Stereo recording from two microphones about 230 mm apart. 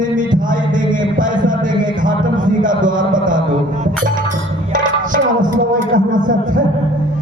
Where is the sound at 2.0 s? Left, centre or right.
Right.